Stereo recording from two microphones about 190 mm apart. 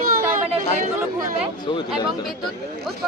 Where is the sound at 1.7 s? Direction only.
25° left (ahead or behind).